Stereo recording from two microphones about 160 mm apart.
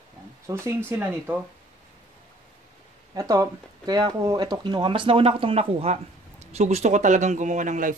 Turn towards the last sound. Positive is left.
turn(degrees=-55)  # may be behind; listen again after turning